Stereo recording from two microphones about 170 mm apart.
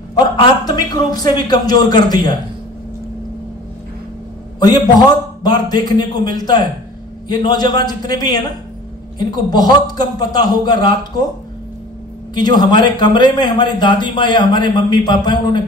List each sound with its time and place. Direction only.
0.1 s a man's voice: 25° left (ahead or behind)
4.6 s a man's voice: 25° left (ahead or behind)
12.4 s a man's voice: 25° left (ahead or behind)